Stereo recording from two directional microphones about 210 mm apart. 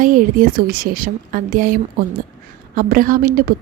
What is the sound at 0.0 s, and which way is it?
A woman's voice, 40° right (ahead or behind).